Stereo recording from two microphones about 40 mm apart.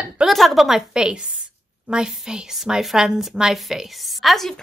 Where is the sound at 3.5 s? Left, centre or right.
Centre.